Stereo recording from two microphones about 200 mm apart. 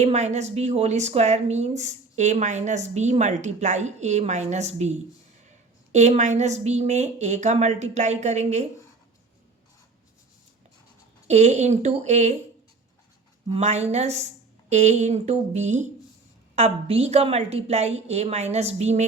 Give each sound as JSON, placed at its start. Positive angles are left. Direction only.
{"t": 0.0, "sound": "a woman's voice", "side_deg": -35}
{"t": 11.3, "sound": "a woman's voice", "side_deg": -35}
{"t": 13.5, "sound": "a woman's voice", "side_deg": -35}